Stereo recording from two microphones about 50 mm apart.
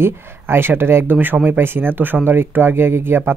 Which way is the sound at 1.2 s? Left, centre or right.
Right.